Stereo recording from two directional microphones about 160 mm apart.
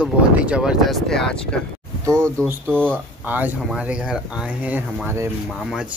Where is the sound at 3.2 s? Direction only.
10° right (ahead or behind).